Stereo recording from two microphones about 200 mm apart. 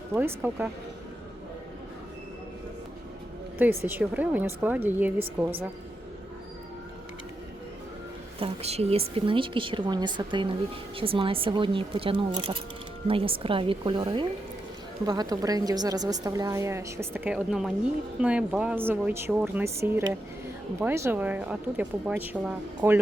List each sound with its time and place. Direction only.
0.1 s speech: 10° right (ahead or behind)
3.8 s a woman's voice: 10° right (ahead or behind)
8.4 s a woman's voice: 30° right (ahead or behind); by 23.0 s 10° right (ahead or behind)